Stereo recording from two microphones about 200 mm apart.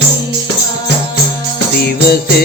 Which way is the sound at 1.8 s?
50° left (ahead or behind).